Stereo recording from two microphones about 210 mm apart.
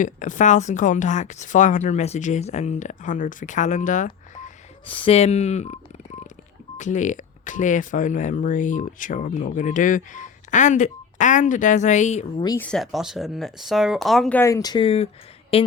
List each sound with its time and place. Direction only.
0.0 s speech: 35° left (ahead or behind)
4.9 s speech: 25° left (ahead or behind)
12.4 s speech: 15° left (ahead or behind)
12.6 s speech: centre (ahead or behind); by 15.6 s 30° left (ahead or behind)